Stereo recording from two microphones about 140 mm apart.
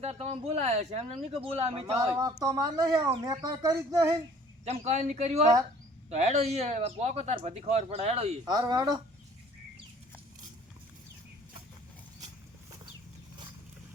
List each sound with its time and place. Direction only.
0.0 s speech: 50° right (ahead or behind)
2.1 s speech: 25° right (ahead or behind)
4.6 s speech: 50° right (ahead or behind)
8.4 s speech: 30° right (ahead or behind)